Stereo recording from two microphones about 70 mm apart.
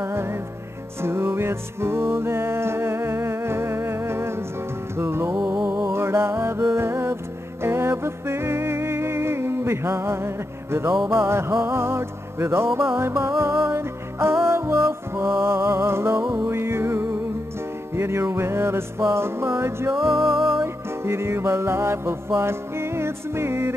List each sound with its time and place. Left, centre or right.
0.0 s music: right
20.3 s music: centre
20.6 s music: right